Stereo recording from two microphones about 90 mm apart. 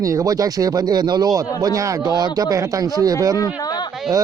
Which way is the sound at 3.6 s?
50° left (ahead or behind).